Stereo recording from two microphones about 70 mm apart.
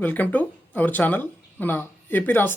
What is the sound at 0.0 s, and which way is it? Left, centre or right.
Speech, left.